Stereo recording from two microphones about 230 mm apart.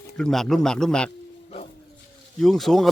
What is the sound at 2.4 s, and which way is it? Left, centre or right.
Speech, centre.